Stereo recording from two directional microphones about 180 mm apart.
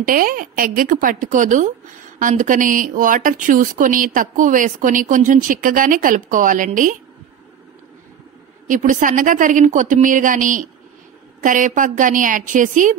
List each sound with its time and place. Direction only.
0.0 s a woman's voice: 50° right (ahead or behind)
8.6 s a woman's voice: 45° right (ahead or behind)